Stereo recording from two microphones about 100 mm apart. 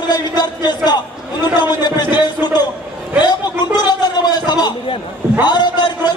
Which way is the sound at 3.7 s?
45° left (ahead or behind).